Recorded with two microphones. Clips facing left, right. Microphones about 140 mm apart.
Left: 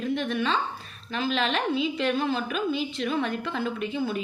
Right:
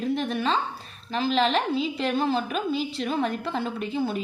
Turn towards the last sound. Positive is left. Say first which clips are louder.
# right 1 dB
turn(degrees=-30)  # may be behind; listen again after turning